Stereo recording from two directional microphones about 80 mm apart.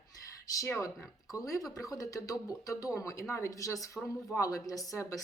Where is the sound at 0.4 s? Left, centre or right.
Left.